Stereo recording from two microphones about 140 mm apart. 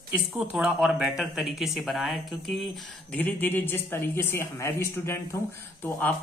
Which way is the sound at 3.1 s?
10° left (ahead or behind).